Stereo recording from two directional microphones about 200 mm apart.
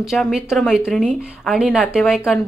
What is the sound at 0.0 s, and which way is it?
Speech, centre (ahead or behind).